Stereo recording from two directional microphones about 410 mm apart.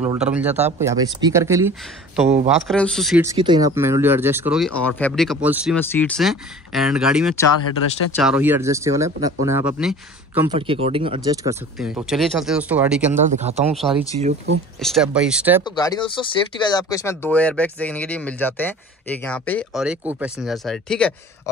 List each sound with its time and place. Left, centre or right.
0.0 s speech: centre
11.8 s speech: centre
13.1 s speech: centre
13.7 s speech: centre
14.1 s speech: centre
14.8 s speech: centre
15.6 s speech: centre